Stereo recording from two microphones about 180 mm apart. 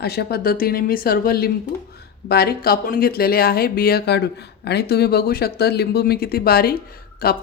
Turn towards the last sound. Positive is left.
turn(degrees=55)  # may be behind; listen again after turning